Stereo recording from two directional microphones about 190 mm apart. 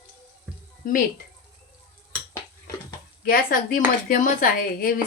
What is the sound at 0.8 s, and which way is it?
Speech, 45° left (ahead or behind).